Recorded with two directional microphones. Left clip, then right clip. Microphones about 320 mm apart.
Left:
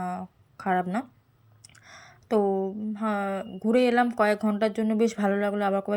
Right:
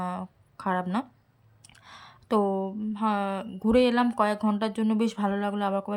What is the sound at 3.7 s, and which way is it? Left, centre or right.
Speech, centre.